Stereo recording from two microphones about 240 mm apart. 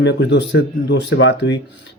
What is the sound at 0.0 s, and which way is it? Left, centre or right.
Speech, left.